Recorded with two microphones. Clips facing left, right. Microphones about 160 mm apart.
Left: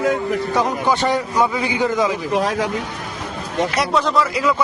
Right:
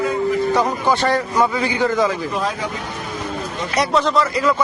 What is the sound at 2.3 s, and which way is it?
Speech, 70° left (ahead or behind).